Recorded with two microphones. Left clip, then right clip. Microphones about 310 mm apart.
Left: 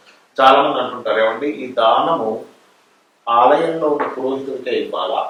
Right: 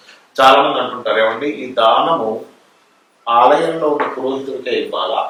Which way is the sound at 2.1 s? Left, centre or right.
Left.